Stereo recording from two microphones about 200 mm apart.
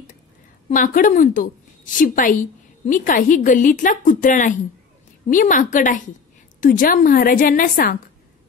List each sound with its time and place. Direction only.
0.7 s a woman's voice: 40° left (ahead or behind)